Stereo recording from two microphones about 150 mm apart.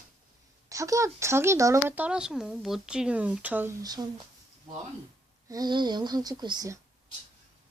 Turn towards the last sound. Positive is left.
turn(degrees=-25)  # may be behind; listen again after turning